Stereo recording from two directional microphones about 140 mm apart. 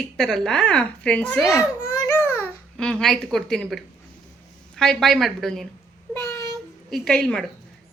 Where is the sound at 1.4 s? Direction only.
20° left (ahead or behind).